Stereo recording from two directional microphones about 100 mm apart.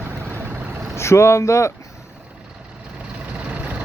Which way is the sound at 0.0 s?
20° right (ahead or behind).